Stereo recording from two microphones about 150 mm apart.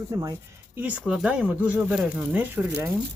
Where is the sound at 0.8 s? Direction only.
10° right (ahead or behind).